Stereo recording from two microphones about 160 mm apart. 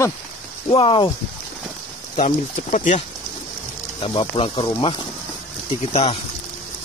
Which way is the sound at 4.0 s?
35° left (ahead or behind).